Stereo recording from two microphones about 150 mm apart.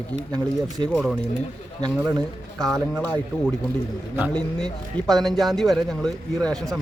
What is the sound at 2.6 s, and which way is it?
Speech, centre (ahead or behind).